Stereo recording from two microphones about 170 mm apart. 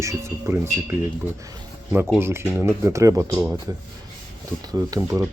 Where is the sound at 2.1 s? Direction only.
15° right (ahead or behind).